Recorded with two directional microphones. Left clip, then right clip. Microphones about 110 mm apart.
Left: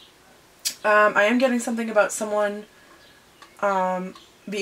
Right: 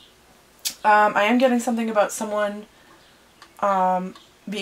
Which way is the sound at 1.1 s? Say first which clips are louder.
Right 1 dB; 30° right (ahead or behind).